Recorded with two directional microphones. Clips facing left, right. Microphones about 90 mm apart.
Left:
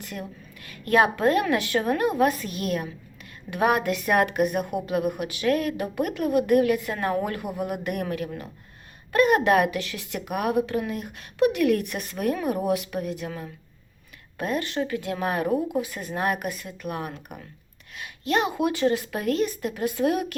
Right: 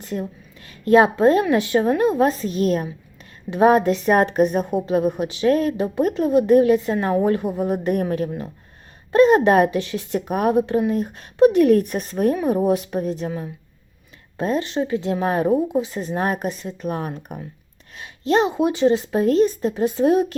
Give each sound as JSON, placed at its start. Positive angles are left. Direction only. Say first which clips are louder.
{"t": 0.0, "sound": "a woman's voice", "louder": "right 8 dB", "side_deg": -30}
{"t": 14.3, "sound": "a woman's voice", "louder": "right 5 dB", "side_deg": -25}